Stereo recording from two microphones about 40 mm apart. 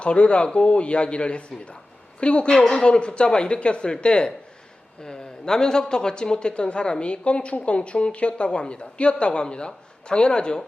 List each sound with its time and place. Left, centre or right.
0.0 s speech: left